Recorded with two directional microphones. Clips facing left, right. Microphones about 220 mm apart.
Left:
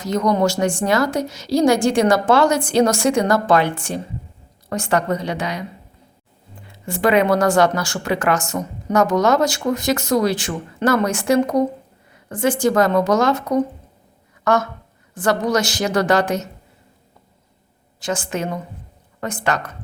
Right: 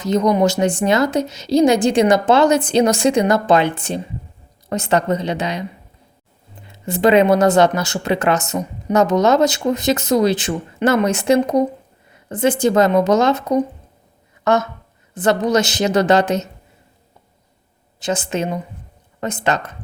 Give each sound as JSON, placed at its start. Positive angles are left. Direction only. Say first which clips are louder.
{"t": 0.0, "sound": "speech", "louder": "right 3 dB", "side_deg": -20}
{"t": 6.7, "sound": "speech", "louder": "right 4 dB", "side_deg": -20}
{"t": 18.0, "sound": "speech", "louder": "right 3 dB", "side_deg": -20}